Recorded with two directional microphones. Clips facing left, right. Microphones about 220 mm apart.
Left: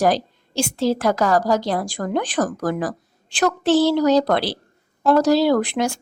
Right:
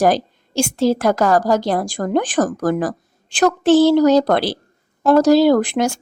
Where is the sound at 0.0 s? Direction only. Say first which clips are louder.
Right 3 dB; 50° right (ahead or behind).